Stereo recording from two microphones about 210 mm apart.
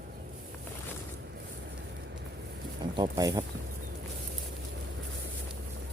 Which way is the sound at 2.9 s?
20° right (ahead or behind).